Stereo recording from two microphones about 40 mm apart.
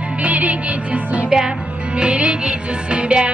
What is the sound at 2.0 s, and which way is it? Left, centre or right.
Music, right.